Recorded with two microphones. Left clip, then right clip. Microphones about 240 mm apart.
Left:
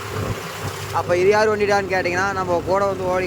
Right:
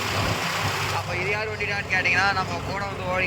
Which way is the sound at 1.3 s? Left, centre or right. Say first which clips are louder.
Left 12 dB; left.